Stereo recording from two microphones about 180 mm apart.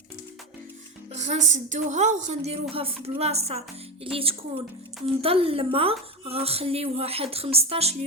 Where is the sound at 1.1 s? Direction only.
40° right (ahead or behind).